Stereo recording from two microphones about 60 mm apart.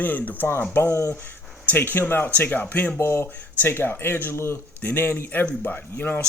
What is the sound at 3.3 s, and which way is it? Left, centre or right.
Speech, left.